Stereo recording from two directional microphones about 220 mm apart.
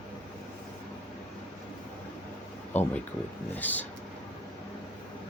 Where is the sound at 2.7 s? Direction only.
30° left (ahead or behind).